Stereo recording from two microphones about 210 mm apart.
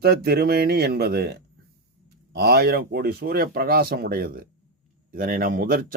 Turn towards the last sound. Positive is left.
turn(degrees=-45)  # may be behind; listen again after turning